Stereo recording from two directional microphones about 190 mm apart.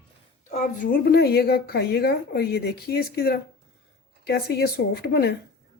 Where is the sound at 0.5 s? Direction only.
50° left (ahead or behind).